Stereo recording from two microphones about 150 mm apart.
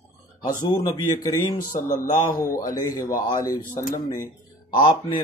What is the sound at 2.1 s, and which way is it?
Speech, 25° left (ahead or behind).